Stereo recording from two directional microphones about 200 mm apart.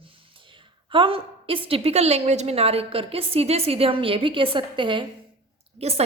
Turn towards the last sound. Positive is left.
turn(degrees=-30)  # may be behind; listen again after turning